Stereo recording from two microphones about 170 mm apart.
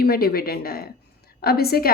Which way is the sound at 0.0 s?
65° left (ahead or behind).